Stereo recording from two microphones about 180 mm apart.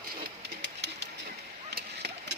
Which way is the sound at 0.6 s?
75° right (ahead or behind).